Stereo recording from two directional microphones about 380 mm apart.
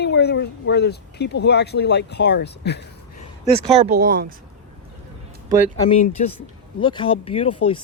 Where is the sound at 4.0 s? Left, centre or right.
Right.